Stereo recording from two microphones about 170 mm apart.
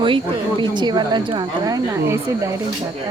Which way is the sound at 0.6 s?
25° right (ahead or behind).